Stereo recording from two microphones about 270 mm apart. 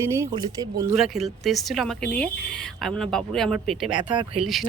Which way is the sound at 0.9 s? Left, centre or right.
Centre.